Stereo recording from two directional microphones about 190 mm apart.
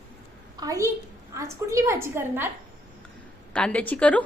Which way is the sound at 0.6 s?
15° right (ahead or behind).